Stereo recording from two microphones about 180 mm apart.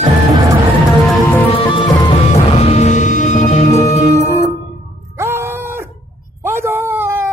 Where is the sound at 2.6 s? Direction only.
40° left (ahead or behind).